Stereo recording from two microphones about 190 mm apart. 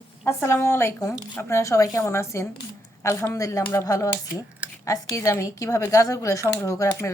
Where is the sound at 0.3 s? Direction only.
10° left (ahead or behind).